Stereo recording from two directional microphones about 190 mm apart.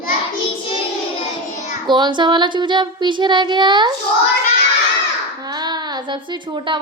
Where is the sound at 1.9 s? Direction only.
25° right (ahead or behind).